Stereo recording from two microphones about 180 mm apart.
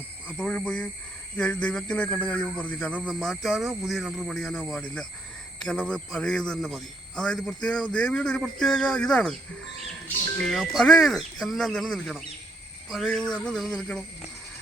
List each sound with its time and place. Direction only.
0.3 s a man's voice: 5° left (ahead or behind)
10.4 s a man's voice: centre (ahead or behind)